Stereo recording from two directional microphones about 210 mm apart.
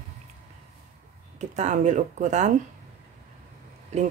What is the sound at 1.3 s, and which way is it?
Speech, 35° right (ahead or behind).